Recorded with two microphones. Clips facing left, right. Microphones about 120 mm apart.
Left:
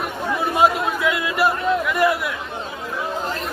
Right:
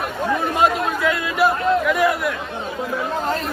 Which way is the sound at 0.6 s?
5° left (ahead or behind).